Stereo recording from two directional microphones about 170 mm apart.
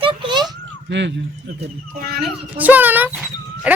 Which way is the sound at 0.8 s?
90° right.